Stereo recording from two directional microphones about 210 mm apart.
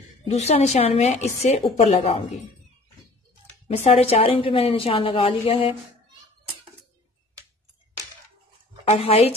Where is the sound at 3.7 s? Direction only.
30° left (ahead or behind).